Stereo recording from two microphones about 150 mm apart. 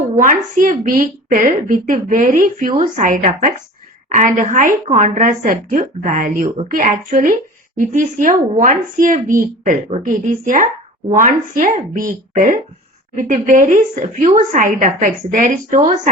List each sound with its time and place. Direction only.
0.2 s a woman's voice: 65° right (ahead or behind)